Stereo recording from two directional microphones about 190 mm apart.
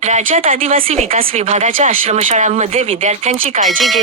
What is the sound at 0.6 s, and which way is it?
Speech, 30° right (ahead or behind).